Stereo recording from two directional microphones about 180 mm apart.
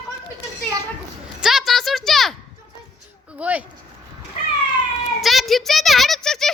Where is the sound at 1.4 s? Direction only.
Centre (ahead or behind).